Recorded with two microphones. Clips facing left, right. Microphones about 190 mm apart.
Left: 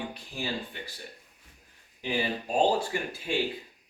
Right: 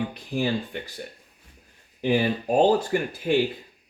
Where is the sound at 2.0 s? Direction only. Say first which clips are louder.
Right 8 dB; 50° right (ahead or behind).